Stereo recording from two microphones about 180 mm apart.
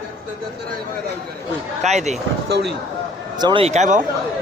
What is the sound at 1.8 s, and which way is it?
Speech, 40° right (ahead or behind).